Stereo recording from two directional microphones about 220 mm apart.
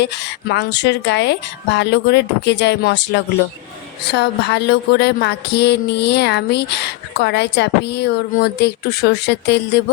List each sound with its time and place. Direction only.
0.0 s a woman's voice: 50° left (ahead or behind)